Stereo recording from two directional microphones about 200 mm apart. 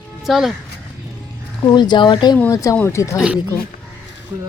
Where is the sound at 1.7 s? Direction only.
20° left (ahead or behind).